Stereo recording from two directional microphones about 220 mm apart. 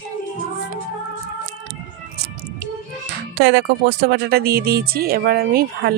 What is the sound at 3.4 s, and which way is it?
Speech, 50° right (ahead or behind).